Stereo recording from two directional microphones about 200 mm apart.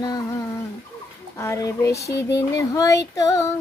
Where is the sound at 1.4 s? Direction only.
15° left (ahead or behind).